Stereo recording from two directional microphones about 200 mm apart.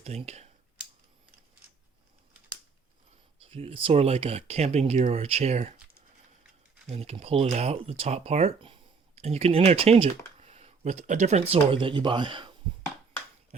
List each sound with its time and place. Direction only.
0.0 s speech: 30° right (ahead or behind)
3.4 s speech: 30° right (ahead or behind)
6.8 s speech: 30° right (ahead or behind)
13.5 s dog: 35° right (ahead or behind)